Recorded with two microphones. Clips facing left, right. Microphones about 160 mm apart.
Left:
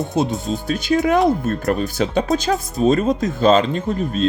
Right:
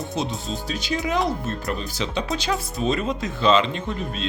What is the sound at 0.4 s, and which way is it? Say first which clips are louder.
Speech: left 7 dB; 50° left (ahead or behind).